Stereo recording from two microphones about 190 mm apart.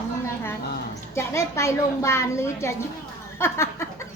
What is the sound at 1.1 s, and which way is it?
A woman's voice, 15° left (ahead or behind).